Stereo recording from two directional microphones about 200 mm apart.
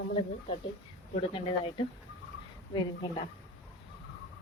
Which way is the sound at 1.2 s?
25° left (ahead or behind).